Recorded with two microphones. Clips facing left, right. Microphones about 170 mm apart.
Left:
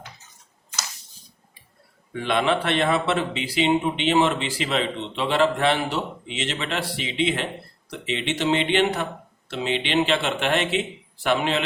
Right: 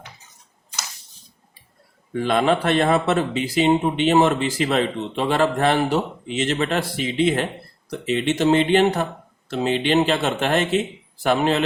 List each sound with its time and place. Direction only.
2.1 s speech: 40° right (ahead or behind)